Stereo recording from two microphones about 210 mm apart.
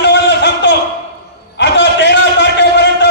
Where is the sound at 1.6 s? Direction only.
55° left (ahead or behind).